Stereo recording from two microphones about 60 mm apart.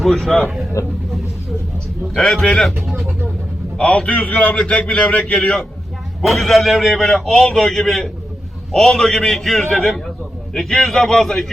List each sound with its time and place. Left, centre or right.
0.0 s a man's voice: centre
0.8 s speech: left
2.1 s a man's voice: centre
3.8 s a man's voice: centre
6.2 s a man's voice: centre